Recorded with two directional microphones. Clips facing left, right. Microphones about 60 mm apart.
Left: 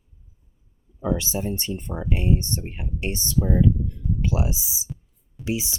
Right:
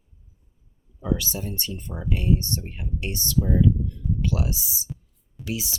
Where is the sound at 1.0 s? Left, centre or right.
Left.